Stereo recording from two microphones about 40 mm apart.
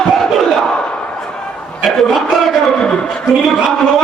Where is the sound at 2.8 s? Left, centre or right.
Centre.